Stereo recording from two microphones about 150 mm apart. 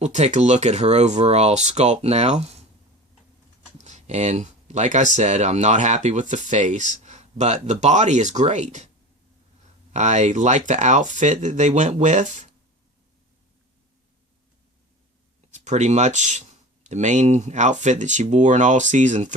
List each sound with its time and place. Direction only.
0.0 s speech: 50° right (ahead or behind)
3.8 s speech: 50° right (ahead or behind)
9.9 s speech: 50° right (ahead or behind)
15.5 s speech: 50° right (ahead or behind)